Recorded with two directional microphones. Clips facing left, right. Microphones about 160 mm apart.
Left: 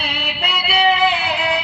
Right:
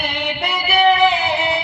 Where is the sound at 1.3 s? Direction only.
25° right (ahead or behind).